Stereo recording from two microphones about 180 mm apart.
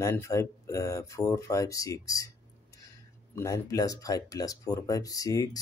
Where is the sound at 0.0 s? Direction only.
15° left (ahead or behind).